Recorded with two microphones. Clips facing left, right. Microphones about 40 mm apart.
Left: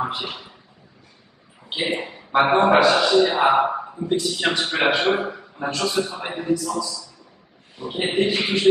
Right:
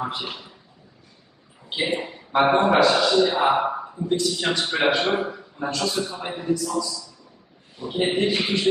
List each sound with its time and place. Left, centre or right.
0.0 s a man's voice: centre
1.7 s a man's voice: centre
6.5 s a man's voice: centre